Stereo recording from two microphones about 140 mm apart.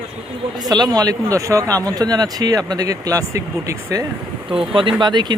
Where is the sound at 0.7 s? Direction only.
30° right (ahead or behind).